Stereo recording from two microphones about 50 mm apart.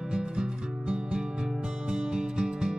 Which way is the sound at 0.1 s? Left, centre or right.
Centre.